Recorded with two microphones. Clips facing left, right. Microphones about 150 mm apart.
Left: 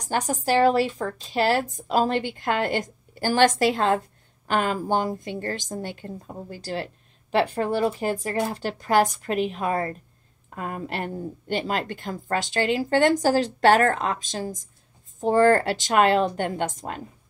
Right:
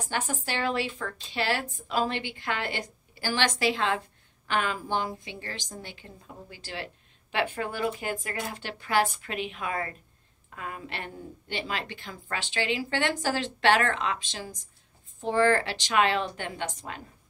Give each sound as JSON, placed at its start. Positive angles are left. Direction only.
{"t": 0.0, "sound": "a woman's voice", "side_deg": 40}